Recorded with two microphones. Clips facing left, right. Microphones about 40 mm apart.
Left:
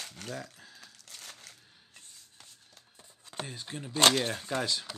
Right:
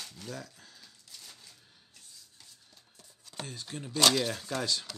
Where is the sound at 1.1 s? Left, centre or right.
Left.